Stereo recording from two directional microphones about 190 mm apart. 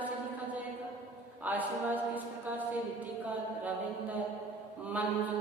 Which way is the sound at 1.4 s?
10° right (ahead or behind).